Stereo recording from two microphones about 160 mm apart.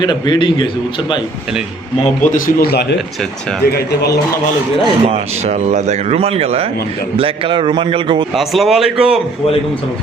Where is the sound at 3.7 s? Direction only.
80° left.